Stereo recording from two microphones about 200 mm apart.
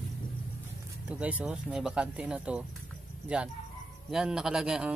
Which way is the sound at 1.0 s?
5° right (ahead or behind).